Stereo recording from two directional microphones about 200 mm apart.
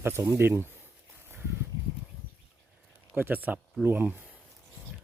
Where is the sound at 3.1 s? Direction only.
10° right (ahead or behind).